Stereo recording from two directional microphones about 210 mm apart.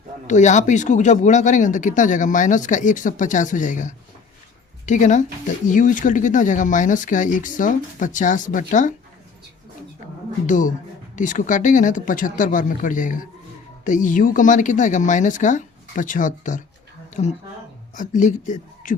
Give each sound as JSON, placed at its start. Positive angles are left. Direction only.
{"t": 0.3, "sound": "speech", "side_deg": 35}
{"t": 10.4, "sound": "speech", "side_deg": 35}